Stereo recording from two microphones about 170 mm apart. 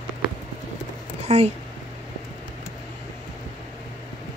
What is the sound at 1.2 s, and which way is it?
Speech, 40° right (ahead or behind).